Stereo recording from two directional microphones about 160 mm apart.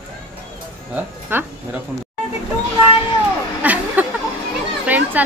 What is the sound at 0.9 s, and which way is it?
Speech, 10° right (ahead or behind).